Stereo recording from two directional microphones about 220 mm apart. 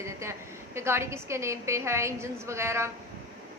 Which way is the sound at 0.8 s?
10° right (ahead or behind).